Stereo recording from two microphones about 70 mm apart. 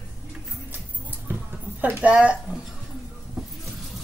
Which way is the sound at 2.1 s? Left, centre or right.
Centre.